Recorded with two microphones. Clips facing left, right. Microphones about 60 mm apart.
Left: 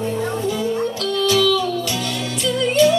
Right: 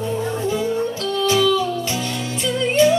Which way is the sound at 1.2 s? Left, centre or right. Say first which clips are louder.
Even; right.